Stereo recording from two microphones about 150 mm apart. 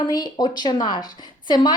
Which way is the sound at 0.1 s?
25° left (ahead or behind).